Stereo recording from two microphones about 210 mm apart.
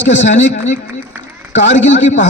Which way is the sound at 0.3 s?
35° left (ahead or behind).